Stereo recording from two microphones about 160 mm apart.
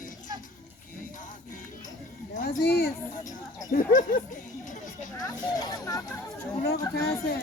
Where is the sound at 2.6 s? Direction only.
85° left.